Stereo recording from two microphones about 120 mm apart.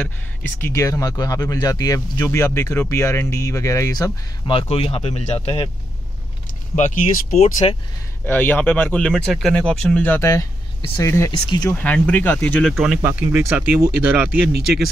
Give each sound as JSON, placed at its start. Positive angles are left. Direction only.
{"t": 0.0, "sound": "speech", "side_deg": 15}
{"t": 4.5, "sound": "speech", "side_deg": 55}
{"t": 6.7, "sound": "speech", "side_deg": 85}
{"t": 8.3, "sound": "speech", "side_deg": 15}
{"t": 11.4, "sound": "speech", "side_deg": 35}
{"t": 11.7, "sound": "speech", "side_deg": 15}
{"t": 12.6, "sound": "speech", "side_deg": -5}
{"t": 13.0, "sound": "speech", "side_deg": -15}